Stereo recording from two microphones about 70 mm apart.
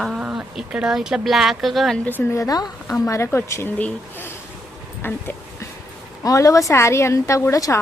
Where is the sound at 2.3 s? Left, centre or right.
Left.